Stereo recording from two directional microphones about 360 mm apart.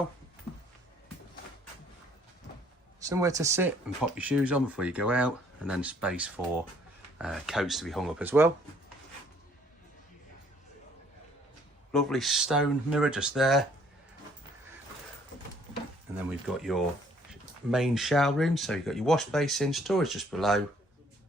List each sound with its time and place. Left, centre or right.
3.0 s speech: centre
11.9 s speech: centre
16.5 s speech: centre